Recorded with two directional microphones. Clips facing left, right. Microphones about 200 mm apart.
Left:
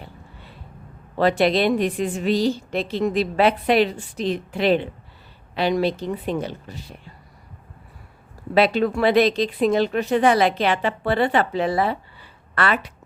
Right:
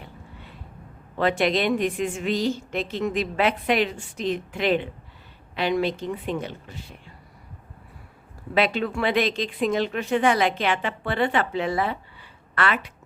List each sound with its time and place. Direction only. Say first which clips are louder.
1.2 s speech: left 4 dB; 35° left (ahead or behind)
8.5 s speech: left 5 dB; 35° left (ahead or behind)